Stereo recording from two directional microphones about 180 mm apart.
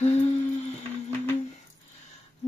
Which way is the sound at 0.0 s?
35° left (ahead or behind).